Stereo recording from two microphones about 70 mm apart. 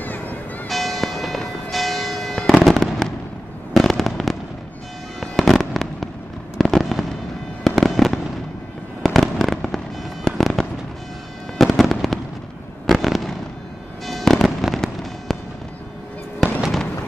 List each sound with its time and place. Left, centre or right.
0.0 s a sound: left
0.7 s church bell: centre
2.3 s fireworks: centre